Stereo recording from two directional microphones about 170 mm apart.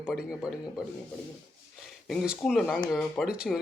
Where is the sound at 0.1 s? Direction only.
5° right (ahead or behind).